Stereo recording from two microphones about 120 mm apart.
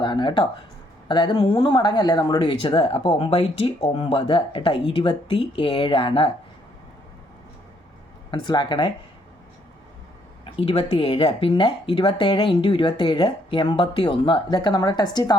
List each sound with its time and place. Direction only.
0.0 s a sound: 40° left (ahead or behind)
1.0 s speech: 40° left (ahead or behind)
8.3 s speech: 40° left (ahead or behind)
10.4 s speech: 55° left (ahead or behind); by 15.4 s 35° left (ahead or behind)